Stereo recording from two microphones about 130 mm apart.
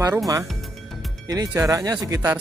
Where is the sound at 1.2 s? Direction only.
25° right (ahead or behind).